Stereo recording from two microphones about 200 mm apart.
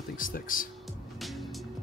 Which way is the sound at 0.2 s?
45° left (ahead or behind).